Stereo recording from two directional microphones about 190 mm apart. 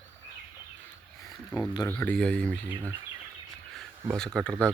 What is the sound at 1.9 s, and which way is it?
Speech, 10° left (ahead or behind).